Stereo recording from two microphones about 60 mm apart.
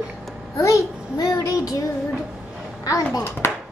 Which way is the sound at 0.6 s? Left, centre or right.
Left.